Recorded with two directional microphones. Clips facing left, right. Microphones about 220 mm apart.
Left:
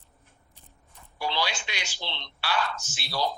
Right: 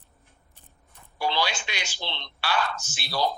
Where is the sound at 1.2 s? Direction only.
65° right (ahead or behind).